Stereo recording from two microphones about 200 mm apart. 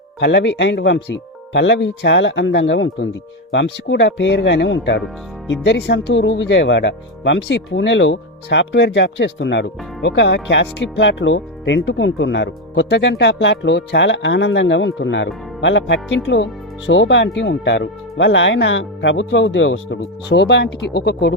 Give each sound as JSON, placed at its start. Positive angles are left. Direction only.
{"t": 0.2, "sound": "speech", "side_deg": 65}